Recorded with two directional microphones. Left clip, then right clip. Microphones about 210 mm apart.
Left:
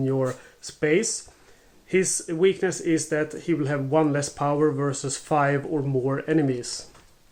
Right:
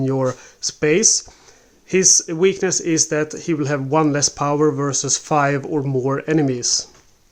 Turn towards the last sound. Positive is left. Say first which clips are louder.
# right 5 dB
turn(degrees=-35)  # may be behind; listen again after turning